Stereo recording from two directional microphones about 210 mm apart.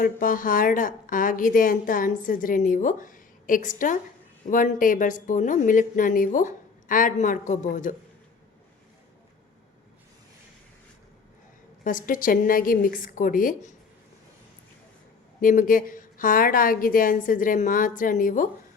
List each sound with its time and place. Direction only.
0.0 s a woman's voice: 40° left (ahead or behind)
11.8 s a woman's voice: 40° left (ahead or behind)
15.4 s a woman's voice: 40° left (ahead or behind)